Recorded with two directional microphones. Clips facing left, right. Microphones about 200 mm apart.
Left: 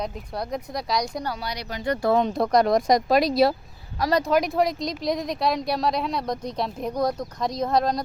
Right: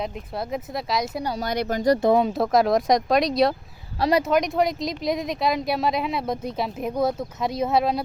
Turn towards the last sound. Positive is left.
turn(degrees=-5)  # may be behind; listen again after turning